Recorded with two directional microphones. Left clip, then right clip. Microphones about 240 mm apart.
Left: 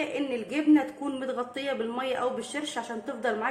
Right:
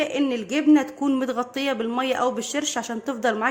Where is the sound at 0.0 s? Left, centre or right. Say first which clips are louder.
Right 6 dB; right.